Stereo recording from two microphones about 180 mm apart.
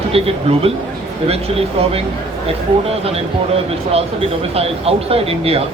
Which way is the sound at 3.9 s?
35° right (ahead or behind).